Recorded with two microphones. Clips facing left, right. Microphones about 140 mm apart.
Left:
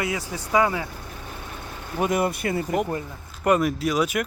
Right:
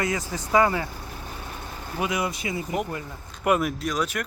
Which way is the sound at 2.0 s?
50° left (ahead or behind).